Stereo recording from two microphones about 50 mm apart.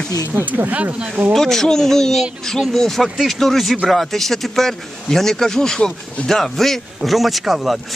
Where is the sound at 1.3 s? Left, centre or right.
Centre.